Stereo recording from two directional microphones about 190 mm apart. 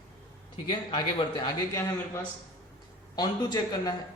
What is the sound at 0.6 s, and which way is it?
A man's voice, 25° left (ahead or behind).